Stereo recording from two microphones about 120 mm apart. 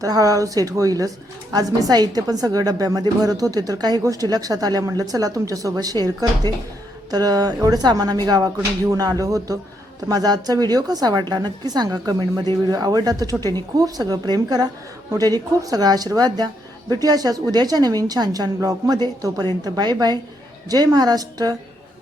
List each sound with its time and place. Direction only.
0.0 s a woman's voice: 30° right (ahead or behind)